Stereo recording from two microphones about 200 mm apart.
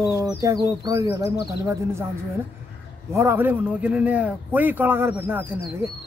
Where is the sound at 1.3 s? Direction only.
55° left (ahead or behind).